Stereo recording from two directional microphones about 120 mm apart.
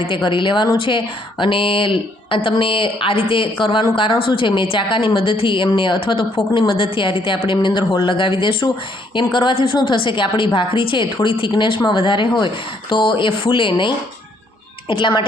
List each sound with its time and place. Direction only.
0.0 s a woman's voice: 45° left (ahead or behind)